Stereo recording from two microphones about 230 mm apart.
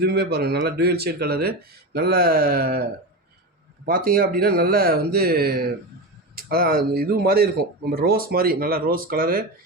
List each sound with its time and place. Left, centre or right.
0.0 s speech: right